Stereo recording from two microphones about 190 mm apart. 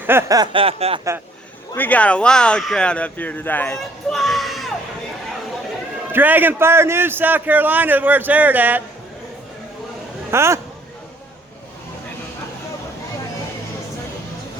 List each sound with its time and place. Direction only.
0.0 s chuckle: 10° right (ahead or behind); by 1.0 s 30° right (ahead or behind)
1.7 s speech: 10° left (ahead or behind)
6.1 s a man's voice: 10° right (ahead or behind)
10.3 s a man's voice: 15° right (ahead or behind)